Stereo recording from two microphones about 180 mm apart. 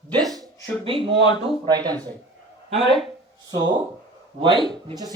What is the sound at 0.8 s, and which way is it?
Speech, 30° right (ahead or behind).